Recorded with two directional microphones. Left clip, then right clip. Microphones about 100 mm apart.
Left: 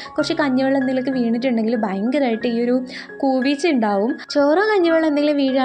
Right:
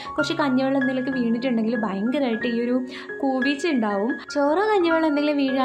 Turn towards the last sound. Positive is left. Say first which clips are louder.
# left 4 dB
turn(degrees=30)  # may be behind; listen again after turning